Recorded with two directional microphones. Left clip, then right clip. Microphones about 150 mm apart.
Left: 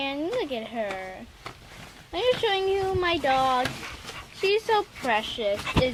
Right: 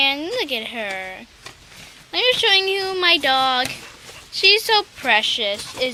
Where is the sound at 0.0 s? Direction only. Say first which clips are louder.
Right 8 dB; 15° right (ahead or behind).